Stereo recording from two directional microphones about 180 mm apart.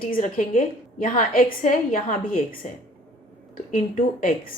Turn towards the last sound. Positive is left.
turn(degrees=50)  # may be behind; listen again after turning